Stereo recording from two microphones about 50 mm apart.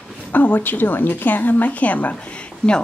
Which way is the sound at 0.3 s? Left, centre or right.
Left.